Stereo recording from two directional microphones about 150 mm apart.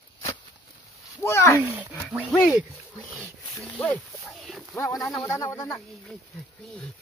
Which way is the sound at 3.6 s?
10° left (ahead or behind).